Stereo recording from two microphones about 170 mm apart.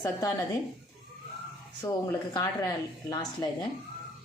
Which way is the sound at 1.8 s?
15° left (ahead or behind).